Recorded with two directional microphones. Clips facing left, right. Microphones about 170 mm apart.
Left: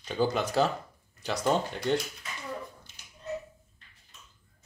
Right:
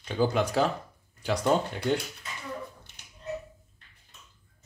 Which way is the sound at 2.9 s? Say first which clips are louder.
Right 1 dB; 65° right (ahead or behind).